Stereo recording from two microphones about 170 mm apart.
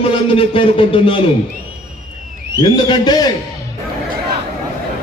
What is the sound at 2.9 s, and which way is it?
Speech, 25° left (ahead or behind).